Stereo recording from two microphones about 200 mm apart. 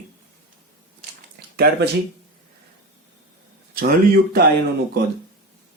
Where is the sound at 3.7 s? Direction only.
45° right (ahead or behind).